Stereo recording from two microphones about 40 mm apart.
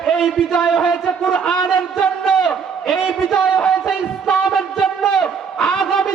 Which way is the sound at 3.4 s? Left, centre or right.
Centre.